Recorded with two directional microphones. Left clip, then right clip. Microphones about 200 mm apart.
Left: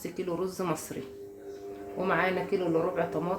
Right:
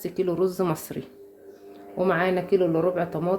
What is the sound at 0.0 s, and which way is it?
Speech, 45° right (ahead or behind).